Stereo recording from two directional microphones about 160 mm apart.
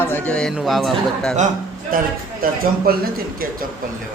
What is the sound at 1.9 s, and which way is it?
A man's voice, 65° right (ahead or behind).